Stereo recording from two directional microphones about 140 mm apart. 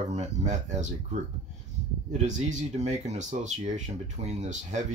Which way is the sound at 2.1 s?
55° right (ahead or behind).